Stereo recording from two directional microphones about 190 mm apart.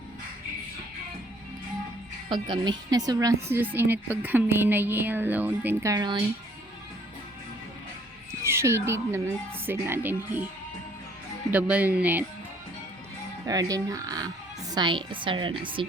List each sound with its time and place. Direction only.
2.3 s a woman's voice: 25° right (ahead or behind)
8.3 s a woman's voice: 15° right (ahead or behind)
11.5 s a woman's voice: 10° right (ahead or behind)
13.4 s a woman's voice: 20° right (ahead or behind)